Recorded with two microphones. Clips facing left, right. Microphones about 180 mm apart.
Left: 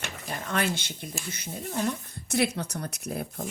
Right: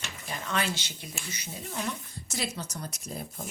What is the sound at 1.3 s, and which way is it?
Speech, 55° left (ahead or behind).